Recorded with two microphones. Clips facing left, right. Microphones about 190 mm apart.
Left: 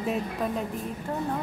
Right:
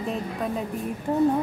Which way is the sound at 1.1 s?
15° right (ahead or behind).